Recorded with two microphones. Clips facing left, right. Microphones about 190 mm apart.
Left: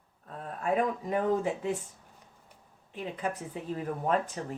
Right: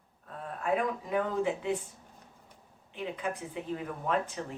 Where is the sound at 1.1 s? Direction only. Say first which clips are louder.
Left 1 dB; 40° left (ahead or behind).